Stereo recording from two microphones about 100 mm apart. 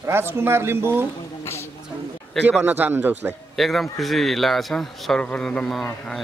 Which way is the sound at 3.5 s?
Centre (ahead or behind).